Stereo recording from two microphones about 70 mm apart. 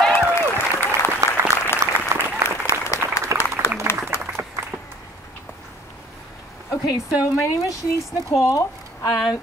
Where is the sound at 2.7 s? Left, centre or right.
Left.